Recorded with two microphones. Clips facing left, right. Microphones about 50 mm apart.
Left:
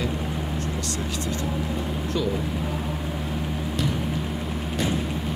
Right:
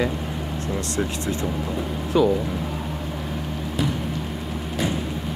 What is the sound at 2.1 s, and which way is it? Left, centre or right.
Speech, centre.